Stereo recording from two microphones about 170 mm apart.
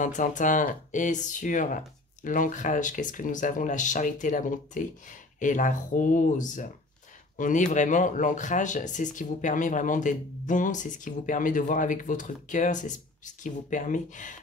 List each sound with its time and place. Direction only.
0.0 s speech: 50° left (ahead or behind)